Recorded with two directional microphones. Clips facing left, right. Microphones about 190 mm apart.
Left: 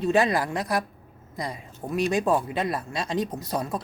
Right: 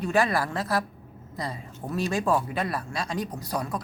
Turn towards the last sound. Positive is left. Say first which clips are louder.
# left 2 dB
turn(degrees=25)  # may be behind; listen again after turning